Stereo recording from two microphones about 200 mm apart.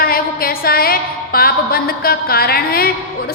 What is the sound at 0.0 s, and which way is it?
A woman's voice, 50° left (ahead or behind).